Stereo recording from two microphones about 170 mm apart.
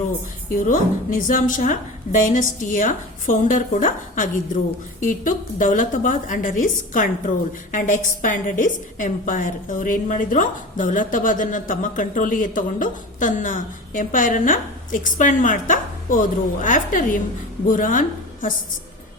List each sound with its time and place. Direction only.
0.6 s a woman's voice: 50° left (ahead or behind)